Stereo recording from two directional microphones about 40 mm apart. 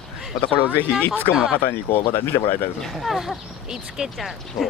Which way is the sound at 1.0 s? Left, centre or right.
Left.